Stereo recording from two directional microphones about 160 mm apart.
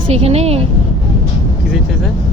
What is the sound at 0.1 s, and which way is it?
Speech, 40° right (ahead or behind).